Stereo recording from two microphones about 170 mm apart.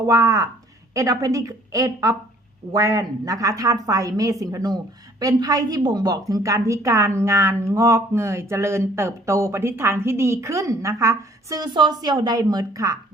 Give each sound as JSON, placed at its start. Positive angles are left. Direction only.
{"t": 0.0, "sound": "a woman's voice", "side_deg": -20}